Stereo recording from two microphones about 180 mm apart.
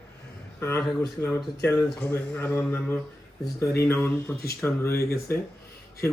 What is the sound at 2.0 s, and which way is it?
Speech, 5° left (ahead or behind).